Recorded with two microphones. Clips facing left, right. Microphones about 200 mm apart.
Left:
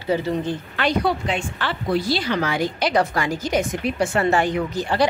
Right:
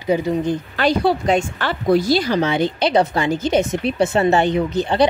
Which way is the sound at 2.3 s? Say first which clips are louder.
Right 4 dB; 25° right (ahead or behind).